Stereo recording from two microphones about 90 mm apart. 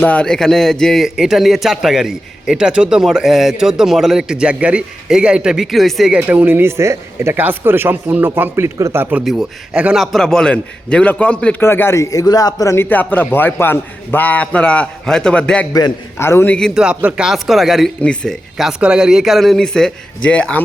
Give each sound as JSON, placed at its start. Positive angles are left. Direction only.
{"t": 0.0, "sound": "a man's voice", "side_deg": 15}
{"t": 6.1, "sound": "speech", "side_deg": -20}
{"t": 9.9, "sound": "a man's voice", "side_deg": 0}
{"t": 11.6, "sound": "speech", "side_deg": 25}
{"t": 12.7, "sound": "a man's voice", "side_deg": 20}
{"t": 16.1, "sound": "a man's voice", "side_deg": 30}
{"t": 16.5, "sound": "a man's voice", "side_deg": 10}
{"t": 16.7, "sound": "a man's voice", "side_deg": -10}
{"t": 18.0, "sound": "a man's voice", "side_deg": 10}
{"t": 18.8, "sound": "a man's voice", "side_deg": -10}